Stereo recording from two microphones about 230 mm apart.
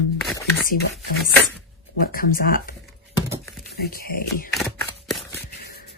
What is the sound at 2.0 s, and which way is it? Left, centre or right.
Speech, left.